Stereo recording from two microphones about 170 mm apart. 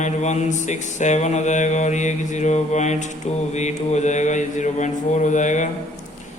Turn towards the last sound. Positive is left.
turn(degrees=45)  # may be behind; listen again after turning